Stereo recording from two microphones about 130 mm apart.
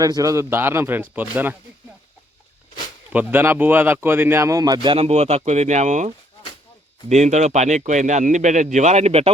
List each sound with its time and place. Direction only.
0.0 s speech: 25° right (ahead or behind)
3.1 s speech: 15° right (ahead or behind); by 9.3 s 55° right (ahead or behind)